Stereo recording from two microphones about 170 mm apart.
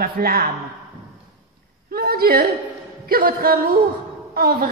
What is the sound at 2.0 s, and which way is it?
A woman's voice, 60° right (ahead or behind).